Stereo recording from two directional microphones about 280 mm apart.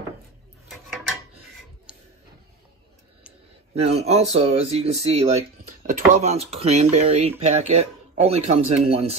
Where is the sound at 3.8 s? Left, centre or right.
Right.